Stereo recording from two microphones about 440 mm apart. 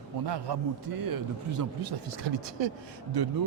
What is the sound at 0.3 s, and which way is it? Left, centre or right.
A man's voice, right.